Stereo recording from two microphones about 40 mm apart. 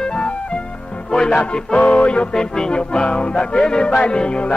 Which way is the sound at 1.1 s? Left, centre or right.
Centre.